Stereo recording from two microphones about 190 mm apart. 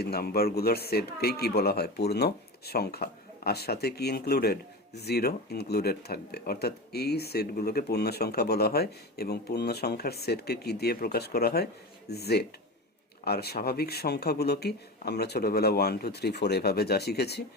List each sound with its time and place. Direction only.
0.0 s speech: 55° left (ahead or behind)